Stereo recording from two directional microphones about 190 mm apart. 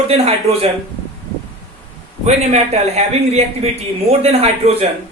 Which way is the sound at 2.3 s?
35° right (ahead or behind).